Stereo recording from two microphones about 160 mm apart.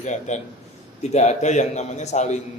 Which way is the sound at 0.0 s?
45° left (ahead or behind).